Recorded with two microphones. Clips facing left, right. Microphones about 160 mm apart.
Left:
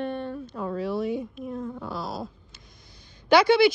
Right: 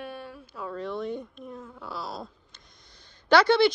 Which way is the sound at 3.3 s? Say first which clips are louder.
Left 2 dB; 10° left (ahead or behind).